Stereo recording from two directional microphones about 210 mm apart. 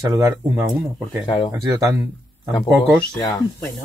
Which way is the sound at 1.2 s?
20° left (ahead or behind).